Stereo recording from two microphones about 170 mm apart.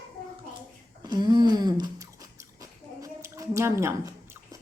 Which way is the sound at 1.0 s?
25° right (ahead or behind).